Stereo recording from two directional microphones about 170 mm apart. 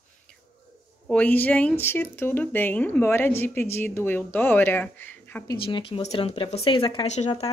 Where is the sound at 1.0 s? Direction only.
10° left (ahead or behind).